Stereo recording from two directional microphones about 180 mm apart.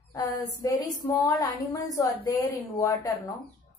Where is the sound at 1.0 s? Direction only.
20° left (ahead or behind).